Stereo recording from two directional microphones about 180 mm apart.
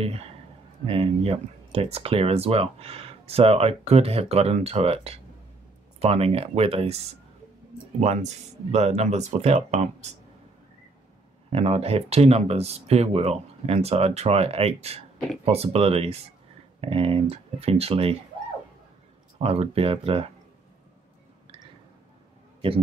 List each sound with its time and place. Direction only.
0.0 s speech: 35° right (ahead or behind)
8.0 s speech: 40° right (ahead or behind)
11.5 s speech: 35° right (ahead or behind)
19.3 s speech: 35° right (ahead or behind)